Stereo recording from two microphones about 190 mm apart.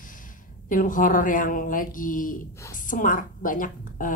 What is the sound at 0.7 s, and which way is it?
A woman's voice, 45° left (ahead or behind).